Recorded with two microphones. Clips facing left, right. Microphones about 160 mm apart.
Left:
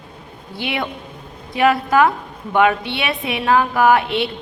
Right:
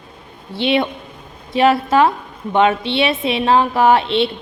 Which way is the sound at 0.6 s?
25° right (ahead or behind).